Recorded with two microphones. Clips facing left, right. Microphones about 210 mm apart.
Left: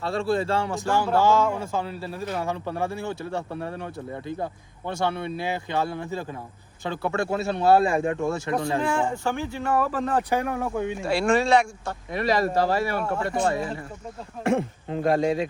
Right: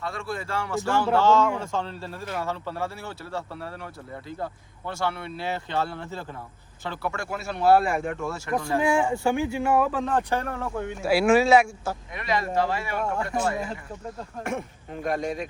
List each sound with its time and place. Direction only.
0.0 s speech: 25° left (ahead or behind)
8.8 s speech: 15° right (ahead or behind)
9.8 s speech: centre (ahead or behind)
11.0 s speech: 5° right (ahead or behind)
12.1 s speech: 35° left (ahead or behind)
13.0 s speech: centre (ahead or behind)
14.4 s speech: 30° left (ahead or behind)